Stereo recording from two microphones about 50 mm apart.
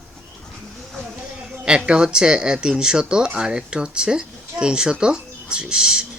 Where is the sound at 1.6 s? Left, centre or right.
Right.